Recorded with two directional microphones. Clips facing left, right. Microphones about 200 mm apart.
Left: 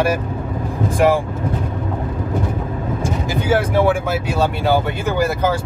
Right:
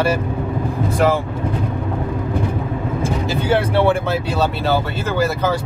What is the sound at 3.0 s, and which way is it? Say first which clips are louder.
Speech: even; 10° left (ahead or behind).